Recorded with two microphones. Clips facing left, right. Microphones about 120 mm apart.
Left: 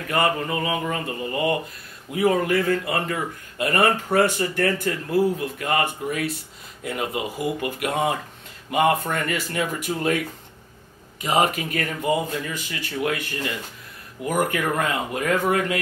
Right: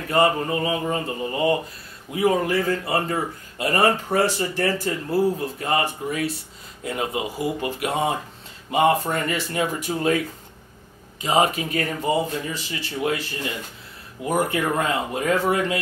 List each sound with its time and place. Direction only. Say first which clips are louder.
0.1 s speech: right 3 dB; 30° right (ahead or behind)
8.9 s speech: right 1 dB; 35° right (ahead or behind)